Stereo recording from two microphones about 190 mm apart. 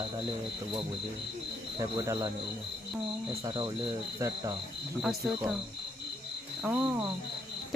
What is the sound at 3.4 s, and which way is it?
Speech, 25° right (ahead or behind).